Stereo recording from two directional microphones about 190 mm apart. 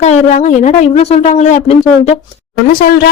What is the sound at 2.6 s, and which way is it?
Speech, 50° left (ahead or behind).